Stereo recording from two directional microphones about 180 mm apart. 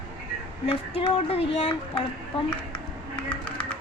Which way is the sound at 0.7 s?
35° left (ahead or behind).